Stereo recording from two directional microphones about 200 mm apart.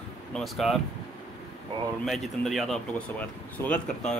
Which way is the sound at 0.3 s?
Centre (ahead or behind).